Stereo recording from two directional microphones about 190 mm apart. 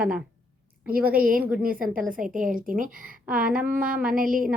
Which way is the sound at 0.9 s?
50° right (ahead or behind).